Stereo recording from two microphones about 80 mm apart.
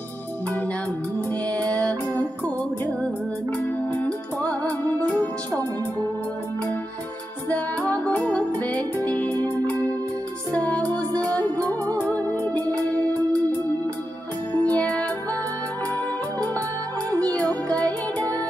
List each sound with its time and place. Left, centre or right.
1.5 s music: centre
7.4 s music: centre
9.3 s music: right
9.7 s music: centre
14.5 s music: centre
17.1 s music: centre